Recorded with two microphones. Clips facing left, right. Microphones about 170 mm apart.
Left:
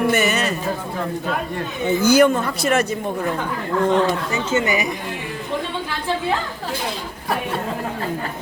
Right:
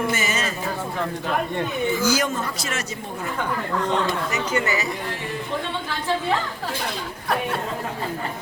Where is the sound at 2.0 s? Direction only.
60° left (ahead or behind).